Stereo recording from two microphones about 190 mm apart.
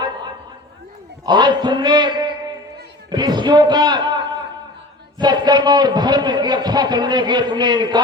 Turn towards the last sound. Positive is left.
turn(degrees=-20)  # may be behind; listen again after turning